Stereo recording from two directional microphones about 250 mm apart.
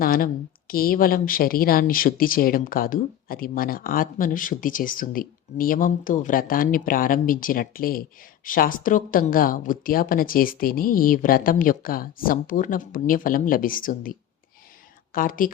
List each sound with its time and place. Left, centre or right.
0.0 s a sound: left
0.7 s speech: left
15.1 s speech: left